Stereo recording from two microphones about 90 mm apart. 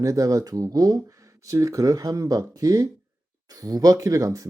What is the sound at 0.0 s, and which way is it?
Speech, 40° right (ahead or behind).